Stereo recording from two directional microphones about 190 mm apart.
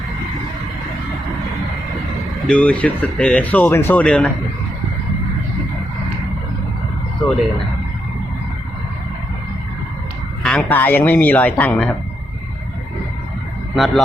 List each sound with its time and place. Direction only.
2.5 s speech: 5° left (ahead or behind)
10.4 s speech: 5° left (ahead or behind)
13.7 s a man's voice: centre (ahead or behind)